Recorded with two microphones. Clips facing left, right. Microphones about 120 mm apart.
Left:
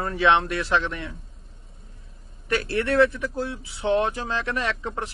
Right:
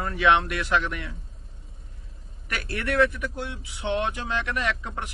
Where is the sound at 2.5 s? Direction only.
30° left (ahead or behind).